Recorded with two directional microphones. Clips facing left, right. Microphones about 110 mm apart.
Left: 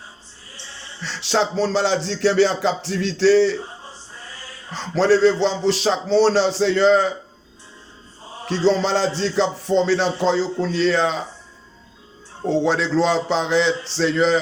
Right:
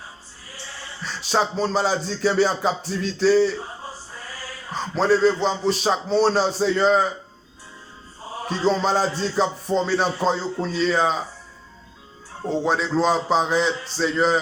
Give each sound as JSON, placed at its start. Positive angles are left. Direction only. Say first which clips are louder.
{"t": 0.5, "sound": "music", "louder": "right 3 dB", "side_deg": 25}
{"t": 1.0, "sound": "speech", "louder": "left 2 dB", "side_deg": 85}
{"t": 4.1, "sound": "music", "louder": "right 3 dB", "side_deg": 25}
{"t": 4.7, "sound": "speech", "louder": "left 3 dB", "side_deg": 90}
{"t": 8.2, "sound": "music", "louder": "right 4 dB", "side_deg": -30}
{"t": 8.4, "sound": "speech", "louder": "left 3 dB", "side_deg": 85}
{"t": 12.5, "sound": "a man's voice", "louder": "left 3 dB", "side_deg": 85}